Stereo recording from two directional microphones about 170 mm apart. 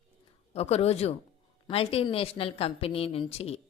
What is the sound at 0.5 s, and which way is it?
A woman's voice, 40° left (ahead or behind).